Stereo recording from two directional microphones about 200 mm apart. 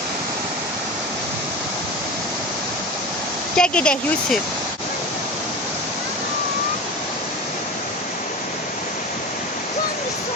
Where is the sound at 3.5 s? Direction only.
5° left (ahead or behind).